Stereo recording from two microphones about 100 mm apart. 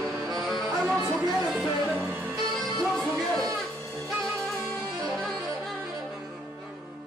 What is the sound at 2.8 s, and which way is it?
Music, centre (ahead or behind).